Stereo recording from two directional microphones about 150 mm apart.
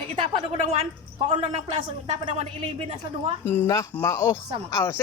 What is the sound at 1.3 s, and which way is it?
Speech, 45° right (ahead or behind).